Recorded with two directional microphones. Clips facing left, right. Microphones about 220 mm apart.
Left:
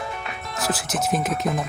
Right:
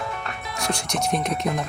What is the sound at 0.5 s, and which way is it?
Speech, 5° left (ahead or behind).